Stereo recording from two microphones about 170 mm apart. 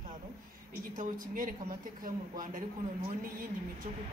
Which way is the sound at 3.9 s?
45° right (ahead or behind).